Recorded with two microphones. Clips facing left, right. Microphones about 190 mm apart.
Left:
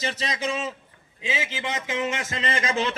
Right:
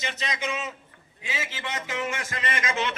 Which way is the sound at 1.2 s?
20° left (ahead or behind).